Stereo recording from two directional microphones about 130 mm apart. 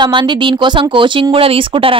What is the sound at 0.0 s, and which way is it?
Speech, 35° right (ahead or behind).